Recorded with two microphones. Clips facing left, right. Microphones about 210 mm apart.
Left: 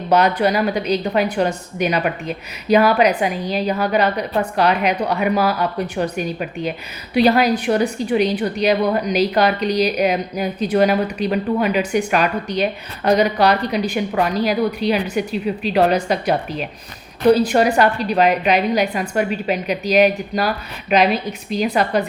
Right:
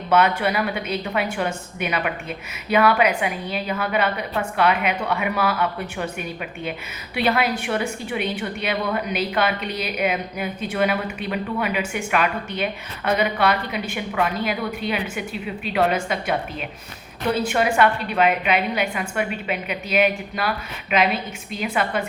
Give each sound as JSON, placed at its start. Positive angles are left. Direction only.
{"t": 0.1, "sound": "a woman's voice", "side_deg": 35}